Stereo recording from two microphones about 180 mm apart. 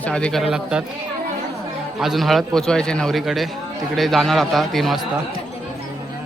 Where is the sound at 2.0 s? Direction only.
Centre (ahead or behind).